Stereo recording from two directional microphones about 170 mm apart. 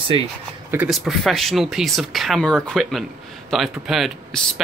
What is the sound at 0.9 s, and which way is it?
Speech, centre (ahead or behind).